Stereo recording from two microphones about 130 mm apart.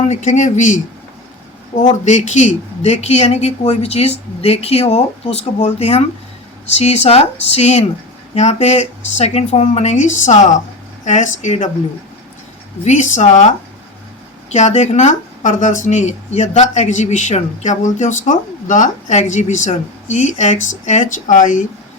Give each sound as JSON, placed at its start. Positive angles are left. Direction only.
{"t": 0.1, "sound": "speech", "side_deg": 70}
{"t": 1.7, "sound": "a woman's voice", "side_deg": 55}
{"t": 2.0, "sound": "a woman's voice", "side_deg": 65}
{"t": 12.8, "sound": "speech", "side_deg": 65}
{"t": 14.8, "sound": "speech", "side_deg": 60}